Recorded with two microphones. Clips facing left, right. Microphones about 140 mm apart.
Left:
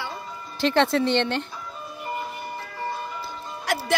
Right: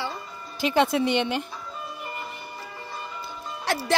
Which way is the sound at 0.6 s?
10° right (ahead or behind).